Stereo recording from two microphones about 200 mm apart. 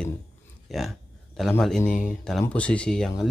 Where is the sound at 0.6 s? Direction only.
Centre (ahead or behind).